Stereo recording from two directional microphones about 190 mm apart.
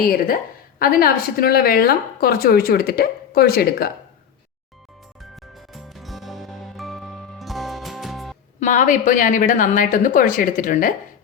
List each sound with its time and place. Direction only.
0.0 s a woman's voice: 50° left (ahead or behind)
5.7 s music: centre (ahead or behind)
8.6 s a woman's voice: 40° left (ahead or behind)